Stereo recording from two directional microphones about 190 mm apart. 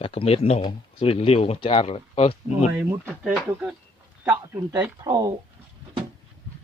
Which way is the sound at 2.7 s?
10° right (ahead or behind).